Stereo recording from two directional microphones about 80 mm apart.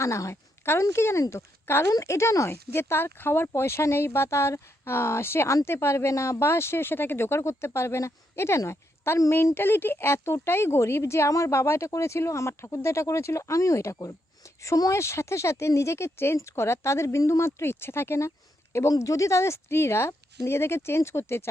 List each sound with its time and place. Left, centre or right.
0.0 s speech: left
1.2 s speech: left
1.6 s a woman's voice: left
1.9 s speech: left